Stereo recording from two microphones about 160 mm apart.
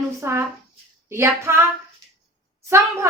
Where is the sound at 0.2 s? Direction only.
15° right (ahead or behind).